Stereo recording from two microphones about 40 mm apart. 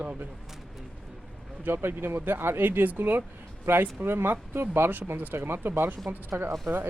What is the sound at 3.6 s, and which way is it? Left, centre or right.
Speech, right.